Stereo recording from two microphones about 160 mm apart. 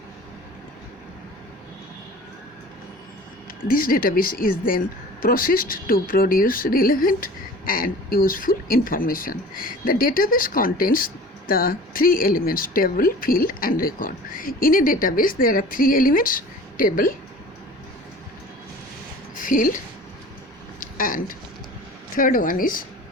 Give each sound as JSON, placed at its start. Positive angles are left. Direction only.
{"t": 3.6, "sound": "speech", "side_deg": 60}
{"t": 19.4, "sound": "speech", "side_deg": 60}
{"t": 20.7, "sound": "a sound", "side_deg": 60}
{"t": 22.1, "sound": "speech", "side_deg": 60}